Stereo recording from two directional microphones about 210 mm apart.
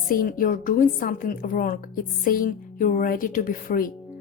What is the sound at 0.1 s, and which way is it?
A woman's voice, 40° left (ahead or behind).